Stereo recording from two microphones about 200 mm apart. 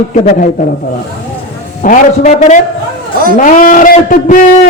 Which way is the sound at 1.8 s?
40° left (ahead or behind).